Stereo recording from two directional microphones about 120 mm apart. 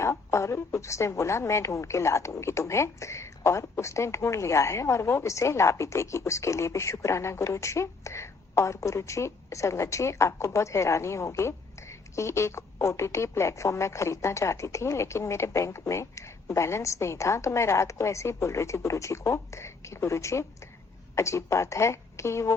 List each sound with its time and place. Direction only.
0.0 s a woman's voice: 25° left (ahead or behind)